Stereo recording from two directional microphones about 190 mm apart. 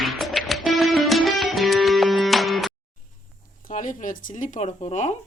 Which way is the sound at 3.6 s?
45° left (ahead or behind).